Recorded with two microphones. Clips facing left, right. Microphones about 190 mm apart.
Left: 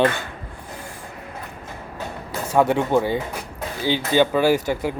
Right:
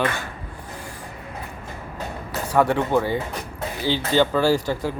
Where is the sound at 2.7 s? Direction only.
10° left (ahead or behind).